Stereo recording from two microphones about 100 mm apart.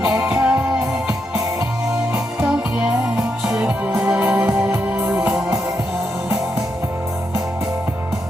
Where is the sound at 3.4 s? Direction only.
10° right (ahead or behind).